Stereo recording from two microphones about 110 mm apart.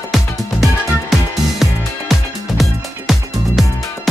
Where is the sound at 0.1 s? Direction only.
Centre (ahead or behind).